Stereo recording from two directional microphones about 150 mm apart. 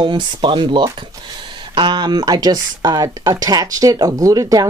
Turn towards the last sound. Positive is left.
turn(degrees=-25)  # may be behind; listen again after turning